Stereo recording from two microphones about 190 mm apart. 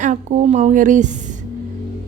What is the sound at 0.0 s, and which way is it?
Speech, 40° right (ahead or behind).